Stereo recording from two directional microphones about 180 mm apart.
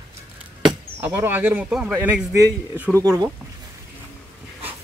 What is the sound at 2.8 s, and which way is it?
Speech, 15° right (ahead or behind).